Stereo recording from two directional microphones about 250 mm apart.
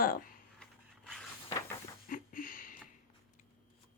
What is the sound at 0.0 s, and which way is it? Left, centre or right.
Speech, left.